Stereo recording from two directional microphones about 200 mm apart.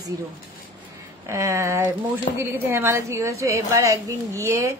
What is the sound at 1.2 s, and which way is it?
A man's voice, 15° right (ahead or behind).